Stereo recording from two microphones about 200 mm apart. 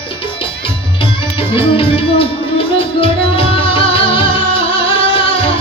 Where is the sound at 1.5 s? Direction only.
25° left (ahead or behind).